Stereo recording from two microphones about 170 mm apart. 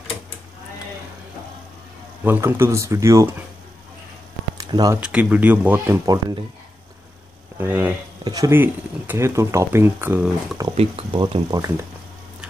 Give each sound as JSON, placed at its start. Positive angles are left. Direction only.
{"t": 2.2, "sound": "speech", "side_deg": -15}
{"t": 4.6, "sound": "a sound", "side_deg": -25}
{"t": 5.0, "sound": "speech", "side_deg": -5}
{"t": 7.5, "sound": "speech", "side_deg": -10}
{"t": 8.2, "sound": "speech", "side_deg": -20}
{"t": 10.7, "sound": "speech", "side_deg": -35}